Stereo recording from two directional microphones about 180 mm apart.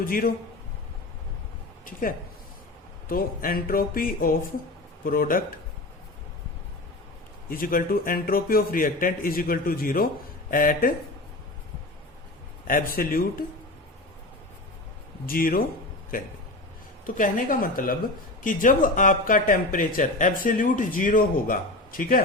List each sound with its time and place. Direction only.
0.0 s speech: 50° left (ahead or behind)
1.8 s speech: 50° left (ahead or behind)
7.4 s speech: 55° left (ahead or behind)
12.6 s speech: 50° left (ahead or behind)
15.3 s speech: 55° left (ahead or behind)
17.2 s speech: 50° left (ahead or behind)